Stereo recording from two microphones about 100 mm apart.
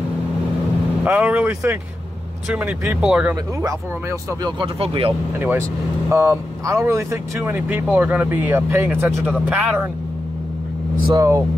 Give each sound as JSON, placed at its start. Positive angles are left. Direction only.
{"t": 1.0, "sound": "speech", "side_deg": -15}
{"t": 3.0, "sound": "speech", "side_deg": -10}
{"t": 4.4, "sound": "speech", "side_deg": -45}
{"t": 4.7, "sound": "speech", "side_deg": -75}
{"t": 6.0, "sound": "speech", "side_deg": -30}
{"t": 9.2, "sound": "speech", "side_deg": -15}
{"t": 11.1, "sound": "speech", "side_deg": -30}